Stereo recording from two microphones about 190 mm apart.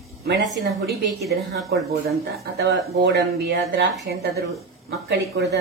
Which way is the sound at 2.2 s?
60° right (ahead or behind).